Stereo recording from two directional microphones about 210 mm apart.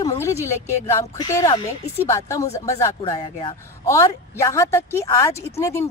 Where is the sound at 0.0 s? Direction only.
15° left (ahead or behind).